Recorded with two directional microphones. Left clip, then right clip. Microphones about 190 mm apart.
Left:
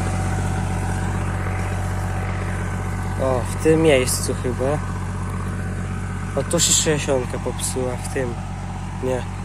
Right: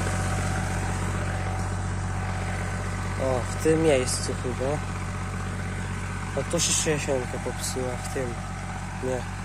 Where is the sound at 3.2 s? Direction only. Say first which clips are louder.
Left 6 dB; centre (ahead or behind).